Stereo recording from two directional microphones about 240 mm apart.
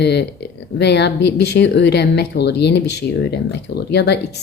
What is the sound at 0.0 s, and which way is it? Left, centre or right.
A woman's voice, left.